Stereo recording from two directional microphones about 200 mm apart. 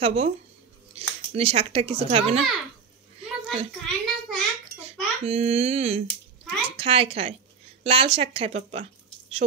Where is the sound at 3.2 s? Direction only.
30° right (ahead or behind).